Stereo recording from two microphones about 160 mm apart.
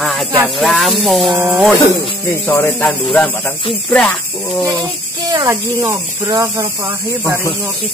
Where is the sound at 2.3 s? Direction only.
15° left (ahead or behind).